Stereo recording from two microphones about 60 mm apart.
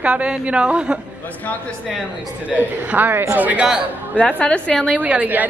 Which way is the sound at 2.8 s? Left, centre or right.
Right.